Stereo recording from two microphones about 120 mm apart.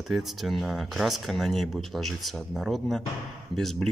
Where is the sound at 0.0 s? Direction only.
Centre (ahead or behind).